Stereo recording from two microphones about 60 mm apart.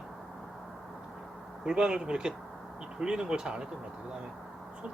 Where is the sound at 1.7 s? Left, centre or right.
Centre.